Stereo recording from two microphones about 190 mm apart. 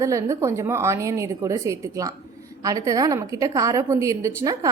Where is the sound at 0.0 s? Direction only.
15° right (ahead or behind).